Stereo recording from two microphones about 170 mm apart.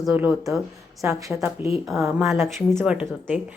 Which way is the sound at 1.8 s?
Centre (ahead or behind).